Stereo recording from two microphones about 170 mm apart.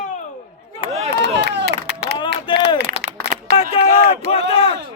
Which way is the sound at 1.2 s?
90° right.